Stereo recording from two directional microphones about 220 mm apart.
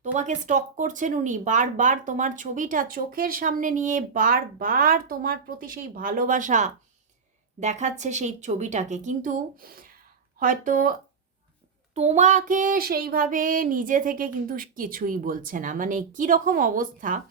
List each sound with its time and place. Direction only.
0.0 s speech: 35° right (ahead or behind)
11.9 s speech: 30° right (ahead or behind)